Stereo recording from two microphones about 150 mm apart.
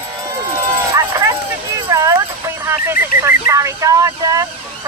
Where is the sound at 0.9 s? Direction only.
20° right (ahead or behind).